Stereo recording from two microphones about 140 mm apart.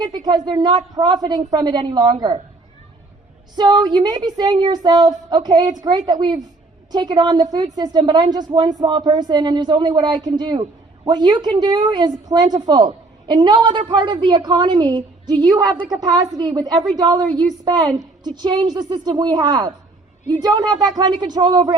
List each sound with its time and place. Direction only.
0.0 s a woman's voice: 30° right (ahead or behind)
3.5 s a woman's voice: 30° right (ahead or behind)